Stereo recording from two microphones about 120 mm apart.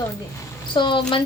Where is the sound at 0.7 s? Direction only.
45° left (ahead or behind).